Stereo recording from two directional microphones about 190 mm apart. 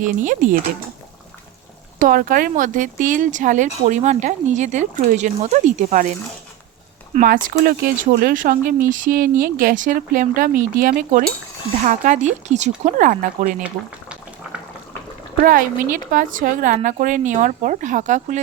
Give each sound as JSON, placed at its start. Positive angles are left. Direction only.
{"t": 0.0, "sound": "speech", "side_deg": -45}
{"t": 2.0, "sound": "speech", "side_deg": -45}
{"t": 15.4, "sound": "speech", "side_deg": -45}